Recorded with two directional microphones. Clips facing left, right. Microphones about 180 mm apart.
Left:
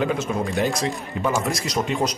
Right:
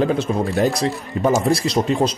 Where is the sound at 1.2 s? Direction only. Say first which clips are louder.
Right 7 dB; 40° right (ahead or behind).